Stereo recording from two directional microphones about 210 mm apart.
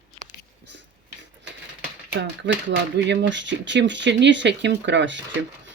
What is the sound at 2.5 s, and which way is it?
Speech, 55° right (ahead or behind).